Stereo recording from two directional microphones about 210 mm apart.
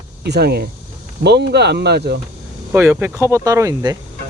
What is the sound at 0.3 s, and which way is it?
Speech, 50° right (ahead or behind).